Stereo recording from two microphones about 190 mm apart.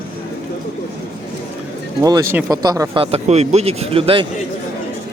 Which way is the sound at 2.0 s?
15° right (ahead or behind).